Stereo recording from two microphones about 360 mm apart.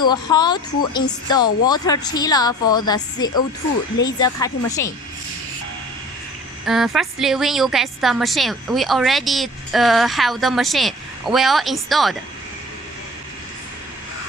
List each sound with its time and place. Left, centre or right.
0.0 s speech: centre
6.7 s a woman's voice: centre